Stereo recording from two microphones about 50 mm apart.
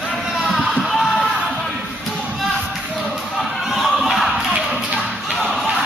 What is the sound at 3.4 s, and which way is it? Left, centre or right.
Thump, centre.